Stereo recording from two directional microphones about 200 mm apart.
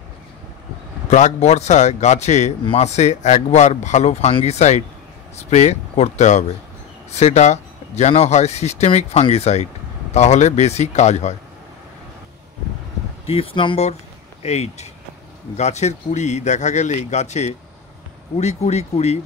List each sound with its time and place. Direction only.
1.0 s a man's voice: 35° left (ahead or behind)
13.3 s a man's voice: 25° left (ahead or behind)